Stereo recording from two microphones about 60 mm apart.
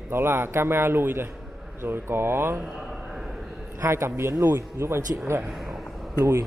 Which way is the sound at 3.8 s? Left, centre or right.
Right.